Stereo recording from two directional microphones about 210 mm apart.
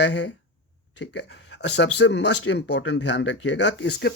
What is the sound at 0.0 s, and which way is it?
Speech, 60° left (ahead or behind).